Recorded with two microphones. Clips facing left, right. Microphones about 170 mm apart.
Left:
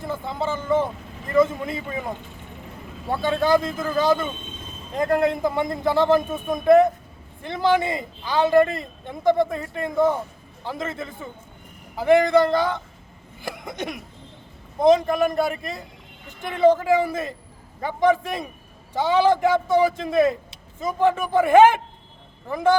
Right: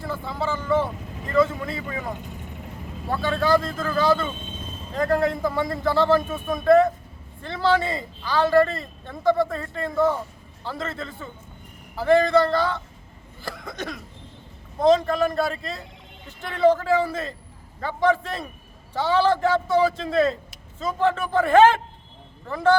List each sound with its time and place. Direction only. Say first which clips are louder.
0.0 s speech: left 1 dB; 20° left (ahead or behind)
13.4 s hiccup: left 2 dB; 20° left (ahead or behind)
14.8 s speech: left 1 dB; 15° left (ahead or behind)